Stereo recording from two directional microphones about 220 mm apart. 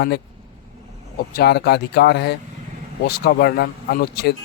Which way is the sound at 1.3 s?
45° left (ahead or behind).